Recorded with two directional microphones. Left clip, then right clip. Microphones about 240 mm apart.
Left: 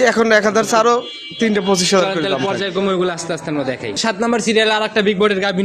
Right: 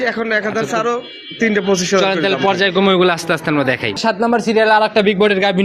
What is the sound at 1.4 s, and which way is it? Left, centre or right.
Speech, centre.